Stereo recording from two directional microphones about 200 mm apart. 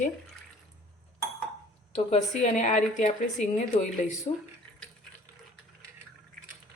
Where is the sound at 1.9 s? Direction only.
35° left (ahead or behind).